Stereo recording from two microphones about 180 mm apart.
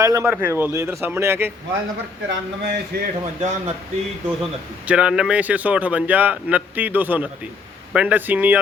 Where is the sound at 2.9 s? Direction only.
60° right (ahead or behind).